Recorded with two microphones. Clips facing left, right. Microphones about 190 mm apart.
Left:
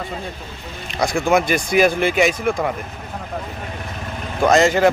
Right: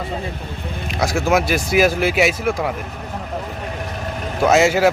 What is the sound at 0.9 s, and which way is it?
A man's voice, centre (ahead or behind).